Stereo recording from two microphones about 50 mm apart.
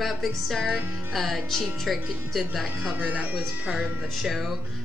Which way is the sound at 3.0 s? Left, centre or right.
Right.